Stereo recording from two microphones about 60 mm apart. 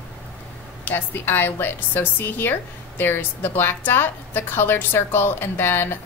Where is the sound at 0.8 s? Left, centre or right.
Left.